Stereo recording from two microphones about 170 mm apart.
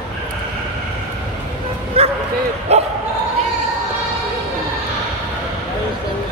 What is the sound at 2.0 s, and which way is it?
Bow-wow, 35° right (ahead or behind).